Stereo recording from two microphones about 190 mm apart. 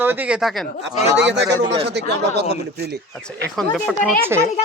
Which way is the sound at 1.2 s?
65° right (ahead or behind).